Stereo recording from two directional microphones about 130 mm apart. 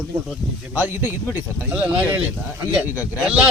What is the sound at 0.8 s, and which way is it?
Speech, 15° right (ahead or behind).